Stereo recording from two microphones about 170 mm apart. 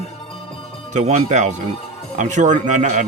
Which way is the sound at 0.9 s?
45° right (ahead or behind).